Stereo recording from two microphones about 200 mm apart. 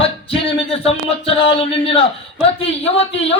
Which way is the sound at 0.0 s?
25° left (ahead or behind).